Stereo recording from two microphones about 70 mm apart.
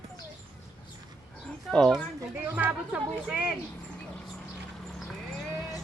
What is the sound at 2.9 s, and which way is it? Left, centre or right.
Speech, centre.